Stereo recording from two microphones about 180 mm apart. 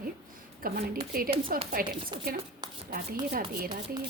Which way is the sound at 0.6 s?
55° right (ahead or behind).